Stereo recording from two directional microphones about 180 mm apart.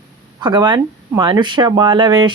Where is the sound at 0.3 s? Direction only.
25° right (ahead or behind).